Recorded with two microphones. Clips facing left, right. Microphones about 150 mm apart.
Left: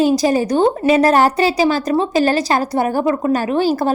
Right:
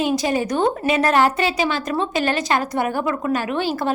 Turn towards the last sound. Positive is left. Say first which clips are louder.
# left 6 dB
turn(degrees=40)  # may be behind; listen again after turning